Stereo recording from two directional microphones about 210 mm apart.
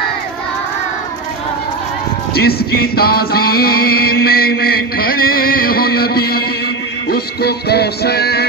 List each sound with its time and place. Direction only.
2.3 s music: 50° left (ahead or behind)